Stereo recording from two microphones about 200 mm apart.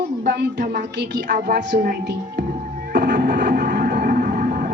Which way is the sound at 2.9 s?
55° right (ahead or behind).